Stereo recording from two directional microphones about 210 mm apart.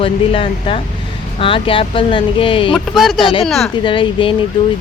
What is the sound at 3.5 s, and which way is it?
Speech, centre (ahead or behind).